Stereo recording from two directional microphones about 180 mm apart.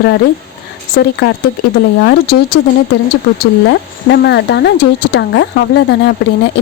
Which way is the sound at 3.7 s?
85° left.